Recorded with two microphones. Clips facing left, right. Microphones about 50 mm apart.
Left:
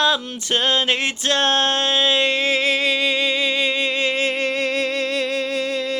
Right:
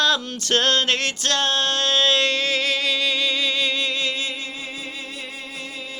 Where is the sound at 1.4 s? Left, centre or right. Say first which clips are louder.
Left 4 dB; left.